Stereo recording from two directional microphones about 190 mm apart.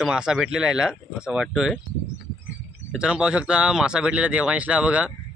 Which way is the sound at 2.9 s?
5° right (ahead or behind).